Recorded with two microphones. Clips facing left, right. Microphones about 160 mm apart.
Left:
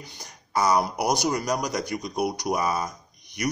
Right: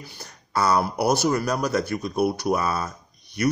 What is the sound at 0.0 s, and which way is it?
Speech, 15° left (ahead or behind).